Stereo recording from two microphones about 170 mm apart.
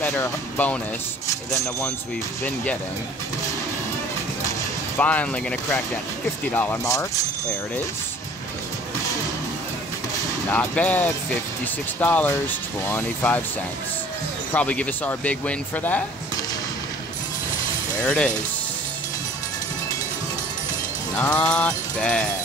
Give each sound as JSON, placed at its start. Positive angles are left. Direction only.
{"t": 0.0, "sound": "speech", "side_deg": 15}
{"t": 2.4, "sound": "speech", "side_deg": 10}
{"t": 4.9, "sound": "speech", "side_deg": 10}
{"t": 10.5, "sound": "speech", "side_deg": 10}
{"t": 14.5, "sound": "speech", "side_deg": 10}
{"t": 18.0, "sound": "speech", "side_deg": 5}
{"t": 21.2, "sound": "speech", "side_deg": 10}